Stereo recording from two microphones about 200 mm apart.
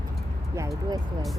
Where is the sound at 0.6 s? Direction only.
15° right (ahead or behind).